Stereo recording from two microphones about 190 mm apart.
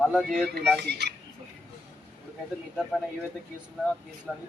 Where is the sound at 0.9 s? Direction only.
60° right (ahead or behind).